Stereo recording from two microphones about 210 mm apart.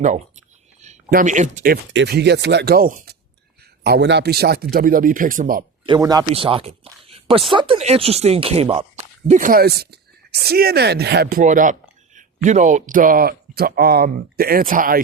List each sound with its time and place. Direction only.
0.8 s speech: 35° right (ahead or behind)
1.9 s speech: 55° right (ahead or behind)
5.8 s speech: 20° right (ahead or behind); by 15.0 s 40° right (ahead or behind)